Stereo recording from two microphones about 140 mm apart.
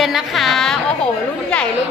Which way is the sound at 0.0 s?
Centre (ahead or behind).